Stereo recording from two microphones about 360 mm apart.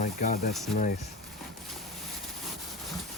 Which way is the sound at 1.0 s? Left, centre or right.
Centre.